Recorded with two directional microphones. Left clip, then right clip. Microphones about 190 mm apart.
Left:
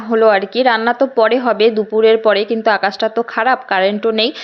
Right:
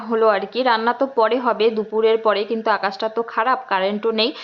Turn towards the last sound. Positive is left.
turn(degrees=15)  # may be behind; listen again after turning